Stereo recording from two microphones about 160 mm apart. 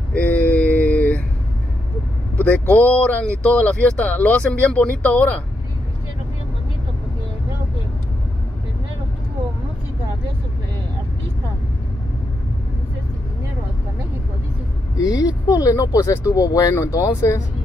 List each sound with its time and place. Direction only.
0.1 s a sound: 10° left (ahead or behind)
2.7 s speech: 10° left (ahead or behind)
15.0 s speech: 20° left (ahead or behind)